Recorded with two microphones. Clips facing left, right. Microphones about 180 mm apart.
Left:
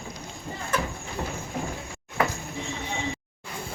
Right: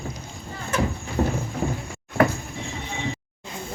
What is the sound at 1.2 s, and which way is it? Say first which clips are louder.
Clip-clop: right 10 dB; 40° right (ahead or behind).